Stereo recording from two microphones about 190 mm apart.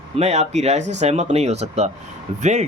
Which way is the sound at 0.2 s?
35° right (ahead or behind).